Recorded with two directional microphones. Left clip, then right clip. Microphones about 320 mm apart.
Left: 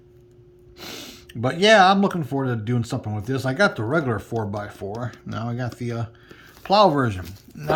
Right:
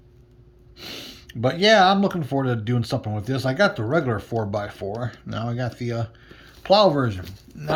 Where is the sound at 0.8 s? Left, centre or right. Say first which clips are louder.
Even; centre.